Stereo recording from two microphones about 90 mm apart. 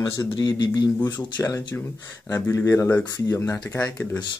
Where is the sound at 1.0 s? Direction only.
30° left (ahead or behind).